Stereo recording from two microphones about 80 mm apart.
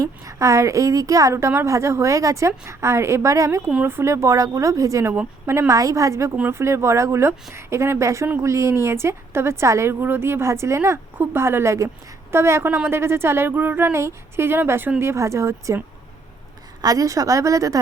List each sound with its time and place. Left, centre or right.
0.0 s a woman's voice: right
15.1 s a woman's voice: right
16.8 s speech: right